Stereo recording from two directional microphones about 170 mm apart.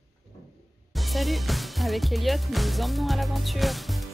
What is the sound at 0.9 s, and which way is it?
Speech, centre (ahead or behind).